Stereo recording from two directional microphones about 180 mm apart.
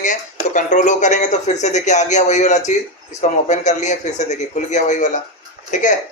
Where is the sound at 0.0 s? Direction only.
45° left (ahead or behind).